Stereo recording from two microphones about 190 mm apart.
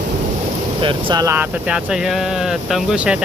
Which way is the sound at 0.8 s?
25° right (ahead or behind).